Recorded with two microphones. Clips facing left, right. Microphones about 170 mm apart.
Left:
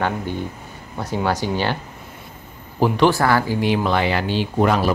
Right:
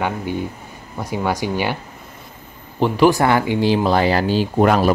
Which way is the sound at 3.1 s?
20° right (ahead or behind).